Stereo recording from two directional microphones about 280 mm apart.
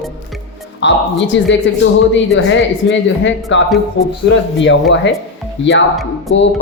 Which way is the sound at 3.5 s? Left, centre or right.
Left.